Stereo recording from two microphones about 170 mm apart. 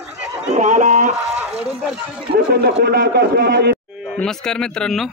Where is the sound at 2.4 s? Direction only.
70° right (ahead or behind).